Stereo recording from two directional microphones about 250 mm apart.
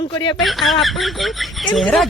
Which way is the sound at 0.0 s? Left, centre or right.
Centre.